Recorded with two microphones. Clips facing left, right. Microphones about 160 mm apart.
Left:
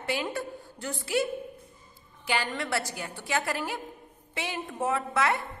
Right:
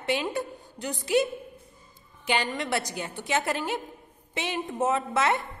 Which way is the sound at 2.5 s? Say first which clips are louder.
Right 2 dB; 20° right (ahead or behind).